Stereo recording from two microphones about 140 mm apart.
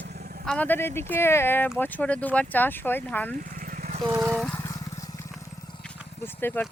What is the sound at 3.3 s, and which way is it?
Vehicle, 75° right (ahead or behind).